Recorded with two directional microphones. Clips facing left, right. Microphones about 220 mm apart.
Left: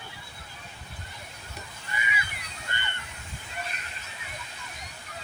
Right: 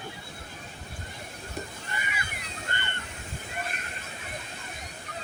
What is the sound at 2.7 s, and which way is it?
Water, 50° right (ahead or behind).